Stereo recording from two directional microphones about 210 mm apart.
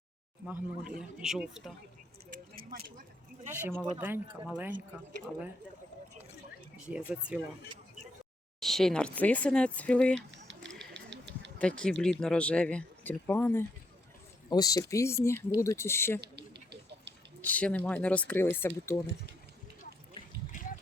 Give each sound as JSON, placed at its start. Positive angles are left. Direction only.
{"t": 0.4, "sound": "speech", "side_deg": -5}
{"t": 3.5, "sound": "speech", "side_deg": -10}
{"t": 6.8, "sound": "speech", "side_deg": -5}
{"t": 8.6, "sound": "speech", "side_deg": 0}
{"t": 10.2, "sound": "a sound", "side_deg": -60}
{"t": 11.6, "sound": "speech", "side_deg": 5}
{"t": 17.4, "sound": "speech", "side_deg": 5}